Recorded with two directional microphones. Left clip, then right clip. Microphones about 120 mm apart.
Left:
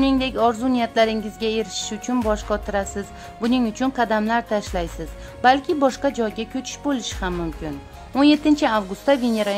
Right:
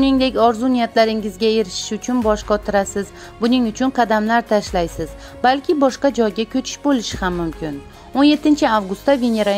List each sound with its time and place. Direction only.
0.0 s speech: 30° right (ahead or behind)